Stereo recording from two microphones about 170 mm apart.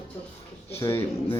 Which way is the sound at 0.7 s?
15° left (ahead or behind).